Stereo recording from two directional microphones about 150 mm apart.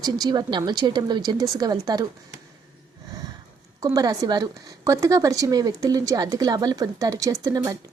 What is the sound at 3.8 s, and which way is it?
A woman's voice, 25° right (ahead or behind).